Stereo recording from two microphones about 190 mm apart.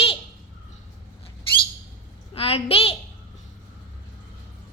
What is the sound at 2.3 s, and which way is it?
Speech, 30° left (ahead or behind).